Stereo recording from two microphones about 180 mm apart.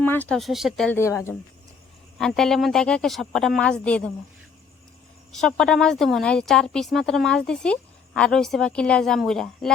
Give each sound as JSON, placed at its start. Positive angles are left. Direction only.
{"t": 0.0, "sound": "speech", "side_deg": 10}
{"t": 0.9, "sound": "speech", "side_deg": 15}
{"t": 2.1, "sound": "speech", "side_deg": 0}
{"t": 5.3, "sound": "speech", "side_deg": 5}